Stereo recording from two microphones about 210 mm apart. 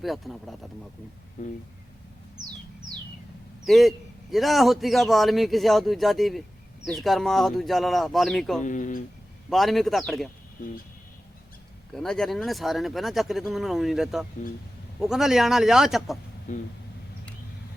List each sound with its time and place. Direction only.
0.0 s a man's voice: centre (ahead or behind)
1.4 s speech: 35° left (ahead or behind)
3.7 s a man's voice: centre (ahead or behind)
8.6 s speech: 35° left (ahead or behind)
9.5 s a man's voice: centre (ahead or behind)
11.9 s a man's voice: centre (ahead or behind)
16.5 s speech: 35° left (ahead or behind)